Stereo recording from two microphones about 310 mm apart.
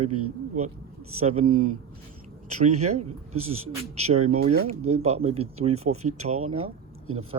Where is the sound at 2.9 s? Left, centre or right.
Right.